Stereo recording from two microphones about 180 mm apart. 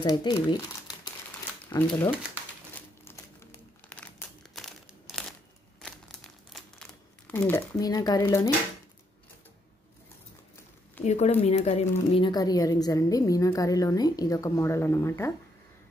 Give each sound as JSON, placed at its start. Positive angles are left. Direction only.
{"t": 0.0, "sound": "speech", "side_deg": 25}
{"t": 1.7, "sound": "speech", "side_deg": 20}
{"t": 2.7, "sound": "crumpling", "side_deg": 15}
{"t": 6.5, "sound": "crumpling", "side_deg": 5}
{"t": 7.3, "sound": "speech", "side_deg": 15}
{"t": 11.1, "sound": "speech", "side_deg": 35}